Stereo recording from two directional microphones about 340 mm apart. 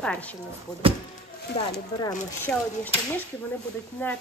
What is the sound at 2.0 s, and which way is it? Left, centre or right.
Speech, centre.